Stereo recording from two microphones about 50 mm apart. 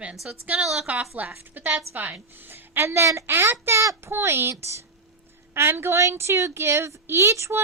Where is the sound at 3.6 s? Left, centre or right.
Right.